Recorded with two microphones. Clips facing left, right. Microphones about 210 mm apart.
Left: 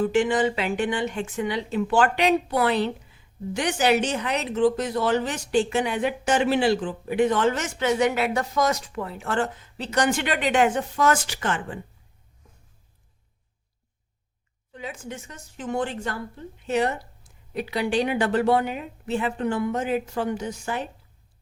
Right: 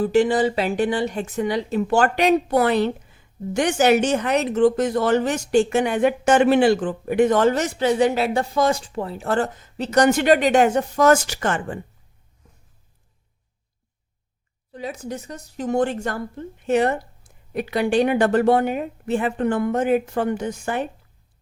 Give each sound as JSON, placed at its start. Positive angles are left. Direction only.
{"t": 0.0, "sound": "a woman's voice", "side_deg": -35}
{"t": 14.7, "sound": "a woman's voice", "side_deg": -35}